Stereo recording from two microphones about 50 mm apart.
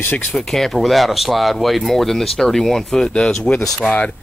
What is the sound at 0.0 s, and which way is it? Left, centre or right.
Speech, left.